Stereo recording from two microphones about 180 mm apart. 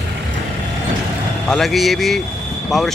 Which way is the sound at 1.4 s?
Centre (ahead or behind).